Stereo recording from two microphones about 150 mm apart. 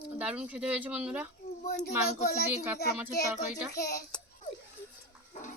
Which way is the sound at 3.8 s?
90° left.